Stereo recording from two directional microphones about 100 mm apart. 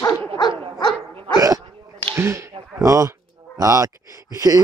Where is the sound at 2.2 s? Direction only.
25° right (ahead or behind).